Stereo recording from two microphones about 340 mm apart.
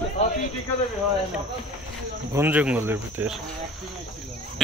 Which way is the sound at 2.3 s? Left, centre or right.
Centre.